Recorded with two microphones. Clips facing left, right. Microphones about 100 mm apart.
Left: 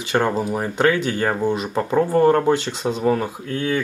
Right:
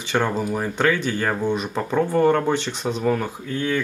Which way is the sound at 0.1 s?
5° left (ahead or behind).